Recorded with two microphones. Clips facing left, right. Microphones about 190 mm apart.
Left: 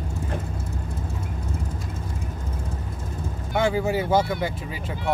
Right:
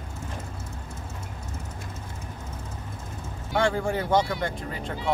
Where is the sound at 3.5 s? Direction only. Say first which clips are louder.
Left 2 dB; 5° left (ahead or behind).